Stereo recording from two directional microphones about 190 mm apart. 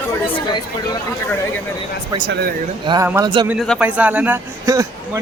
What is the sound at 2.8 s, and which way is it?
Speech, 25° right (ahead or behind).